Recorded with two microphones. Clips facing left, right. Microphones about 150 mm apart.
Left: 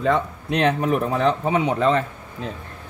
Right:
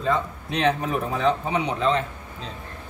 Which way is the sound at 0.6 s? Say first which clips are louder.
Left 3 dB; 60° left (ahead or behind).